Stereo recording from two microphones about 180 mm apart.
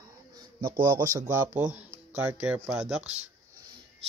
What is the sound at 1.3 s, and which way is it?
Speech, 10° right (ahead or behind).